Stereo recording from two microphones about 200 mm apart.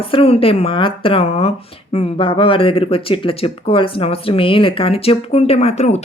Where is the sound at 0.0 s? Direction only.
25° left (ahead or behind).